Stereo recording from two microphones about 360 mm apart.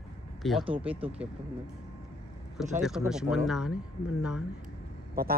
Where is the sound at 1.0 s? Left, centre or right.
Centre.